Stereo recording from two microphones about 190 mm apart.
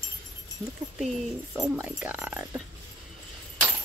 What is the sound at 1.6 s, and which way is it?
Speech, 10° right (ahead or behind).